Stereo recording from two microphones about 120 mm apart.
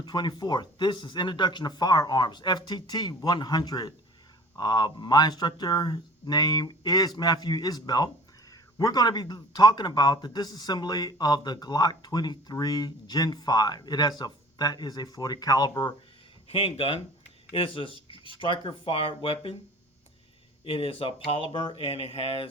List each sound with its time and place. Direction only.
0.0 s speech: 35° left (ahead or behind)
16.5 s speech: 55° left (ahead or behind)
20.7 s speech: 50° left (ahead or behind)